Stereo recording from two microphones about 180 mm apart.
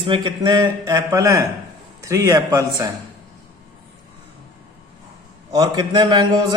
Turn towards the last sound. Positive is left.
turn(degrees=-25)  # may be behind; listen again after turning